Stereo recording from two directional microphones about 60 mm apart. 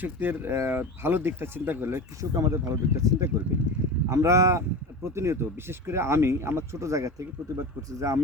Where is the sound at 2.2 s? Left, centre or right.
Right.